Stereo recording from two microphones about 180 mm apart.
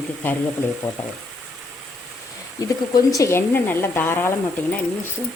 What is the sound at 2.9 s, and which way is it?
Sizzle, 20° left (ahead or behind).